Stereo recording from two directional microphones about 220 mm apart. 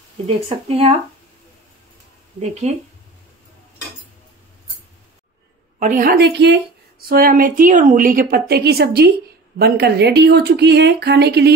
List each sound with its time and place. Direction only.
0.7 s speech: 25° right (ahead or behind)
2.4 s speech: 30° right (ahead or behind)
5.8 s a woman's voice: 35° right (ahead or behind)